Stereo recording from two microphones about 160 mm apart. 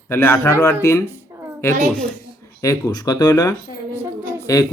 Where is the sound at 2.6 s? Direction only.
20° left (ahead or behind).